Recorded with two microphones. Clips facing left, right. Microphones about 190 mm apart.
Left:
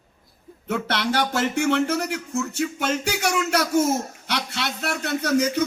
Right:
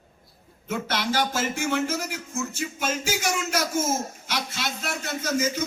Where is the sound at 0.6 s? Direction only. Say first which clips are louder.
Left 3 dB; 65° left (ahead or behind).